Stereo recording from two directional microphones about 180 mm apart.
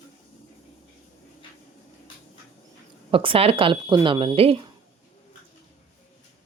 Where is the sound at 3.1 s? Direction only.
30° right (ahead or behind).